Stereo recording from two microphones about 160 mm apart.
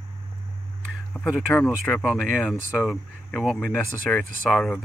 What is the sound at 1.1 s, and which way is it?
Speech, 5° left (ahead or behind).